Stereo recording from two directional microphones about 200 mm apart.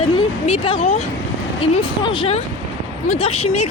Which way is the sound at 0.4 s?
30° left (ahead or behind).